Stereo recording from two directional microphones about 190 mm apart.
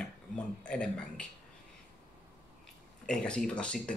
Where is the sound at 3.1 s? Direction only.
5° left (ahead or behind).